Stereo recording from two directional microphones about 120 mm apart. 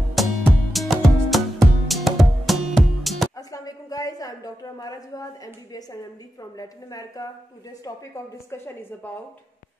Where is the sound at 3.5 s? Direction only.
30° left (ahead or behind).